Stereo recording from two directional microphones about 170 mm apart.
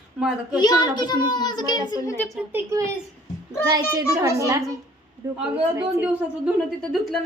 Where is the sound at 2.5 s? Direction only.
15° right (ahead or behind).